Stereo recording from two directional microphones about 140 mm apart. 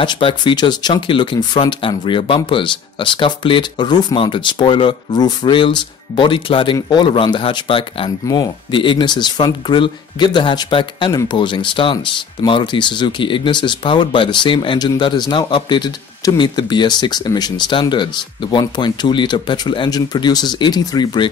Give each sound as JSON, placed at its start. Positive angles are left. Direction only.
{"t": 0.0, "sound": "speech", "side_deg": 35}